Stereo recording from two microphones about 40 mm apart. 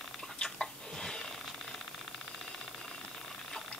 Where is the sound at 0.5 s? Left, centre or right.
Centre.